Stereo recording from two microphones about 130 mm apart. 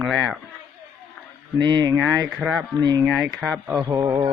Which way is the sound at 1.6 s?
35° right (ahead or behind).